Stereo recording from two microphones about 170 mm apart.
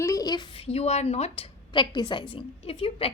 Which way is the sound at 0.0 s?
20° left (ahead or behind).